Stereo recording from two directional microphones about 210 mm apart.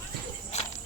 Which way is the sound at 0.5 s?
30° left (ahead or behind).